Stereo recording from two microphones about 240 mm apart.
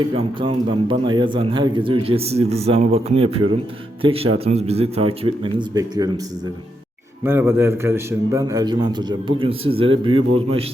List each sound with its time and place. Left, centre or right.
0.1 s a man's voice: right
7.3 s a man's voice: centre